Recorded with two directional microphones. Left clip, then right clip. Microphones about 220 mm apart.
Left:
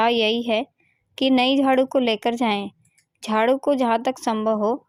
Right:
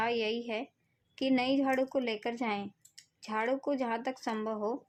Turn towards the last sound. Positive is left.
turn(degrees=35)  # may be behind; listen again after turning